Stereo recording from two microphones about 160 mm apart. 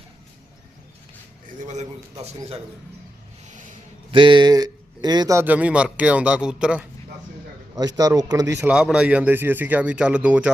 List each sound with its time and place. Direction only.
1.5 s a sound: 45° right (ahead or behind)
4.1 s a man's voice: 30° right (ahead or behind); by 6.8 s 5° right (ahead or behind)
7.9 s speech: 25° right (ahead or behind)
8.6 s a man's voice: 5° right (ahead or behind)